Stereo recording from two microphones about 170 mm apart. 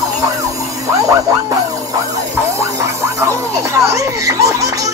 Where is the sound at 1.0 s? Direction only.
20° right (ahead or behind).